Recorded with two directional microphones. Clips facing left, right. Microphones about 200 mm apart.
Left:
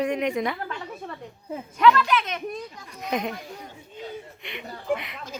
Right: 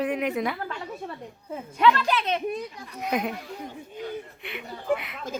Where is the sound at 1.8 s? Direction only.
30° right (ahead or behind).